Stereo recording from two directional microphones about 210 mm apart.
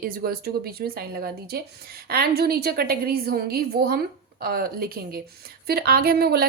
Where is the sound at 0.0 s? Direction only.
45° right (ahead or behind).